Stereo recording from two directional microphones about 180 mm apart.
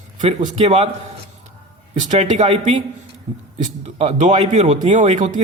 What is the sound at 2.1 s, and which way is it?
Speech, 40° right (ahead or behind).